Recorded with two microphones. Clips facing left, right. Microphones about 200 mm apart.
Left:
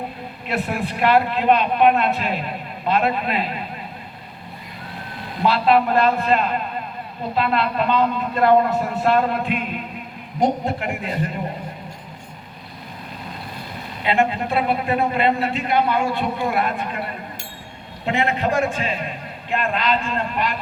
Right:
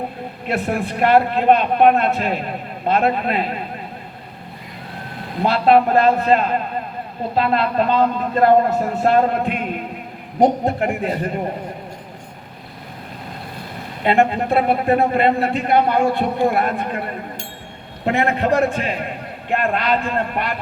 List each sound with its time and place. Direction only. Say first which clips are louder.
0.4 s a man's voice: right 3 dB; 50° right (ahead or behind)
5.4 s a man's voice: right 3 dB; 45° right (ahead or behind)
14.0 s a man's voice: right 4 dB; 50° right (ahead or behind)